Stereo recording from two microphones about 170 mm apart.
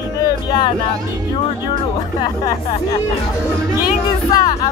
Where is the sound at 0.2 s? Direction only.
25° left (ahead or behind).